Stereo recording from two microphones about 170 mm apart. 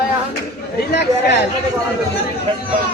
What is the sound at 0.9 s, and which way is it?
Speech, 85° left.